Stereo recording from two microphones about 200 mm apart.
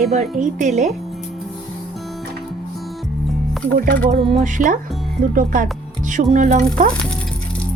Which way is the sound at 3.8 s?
45° right (ahead or behind).